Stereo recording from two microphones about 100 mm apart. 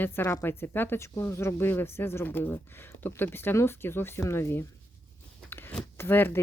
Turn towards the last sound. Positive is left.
turn(degrees=20)  # may be behind; listen again after turning